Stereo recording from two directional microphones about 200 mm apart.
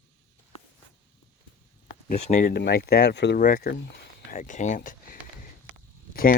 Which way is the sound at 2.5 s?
55° left (ahead or behind).